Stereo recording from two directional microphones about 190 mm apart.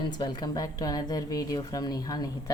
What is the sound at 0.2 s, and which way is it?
A woman's voice, 20° left (ahead or behind).